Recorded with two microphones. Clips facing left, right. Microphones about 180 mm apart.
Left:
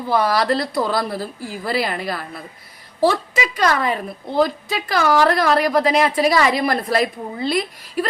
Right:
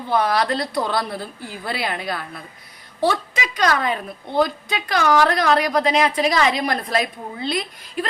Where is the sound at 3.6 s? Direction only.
45° left (ahead or behind).